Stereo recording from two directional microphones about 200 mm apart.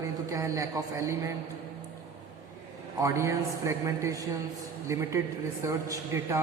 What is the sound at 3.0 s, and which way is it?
A man's voice, 15° right (ahead or behind).